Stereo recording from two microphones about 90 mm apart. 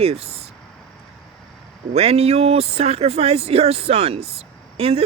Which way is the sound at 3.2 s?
90° right.